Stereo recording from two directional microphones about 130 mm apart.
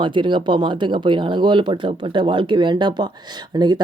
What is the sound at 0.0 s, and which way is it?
Speech, 40° right (ahead or behind).